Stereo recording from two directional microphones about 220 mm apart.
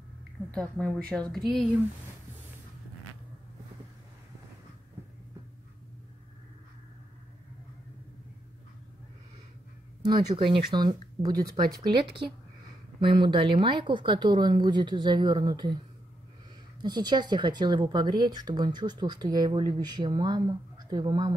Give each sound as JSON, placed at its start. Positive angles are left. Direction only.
{"t": 0.5, "sound": "speech", "side_deg": 5}
{"t": 10.0, "sound": "speech", "side_deg": -20}
{"t": 16.8, "sound": "speech", "side_deg": -20}